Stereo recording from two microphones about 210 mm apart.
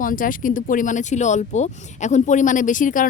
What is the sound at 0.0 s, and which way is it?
A woman's voice, 40° left (ahead or behind).